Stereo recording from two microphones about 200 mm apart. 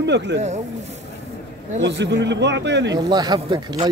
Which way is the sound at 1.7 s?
60° right (ahead or behind).